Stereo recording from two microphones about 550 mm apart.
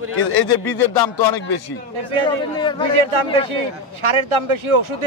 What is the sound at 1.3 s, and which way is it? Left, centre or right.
Speech, left.